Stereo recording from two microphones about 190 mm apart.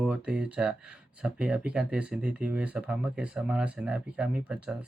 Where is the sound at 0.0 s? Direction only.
5° right (ahead or behind).